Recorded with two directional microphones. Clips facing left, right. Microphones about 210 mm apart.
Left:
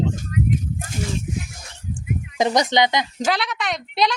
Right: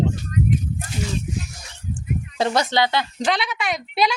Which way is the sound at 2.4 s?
15° left (ahead or behind).